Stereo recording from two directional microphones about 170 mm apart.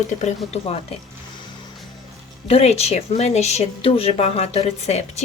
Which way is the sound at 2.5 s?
35° left (ahead or behind).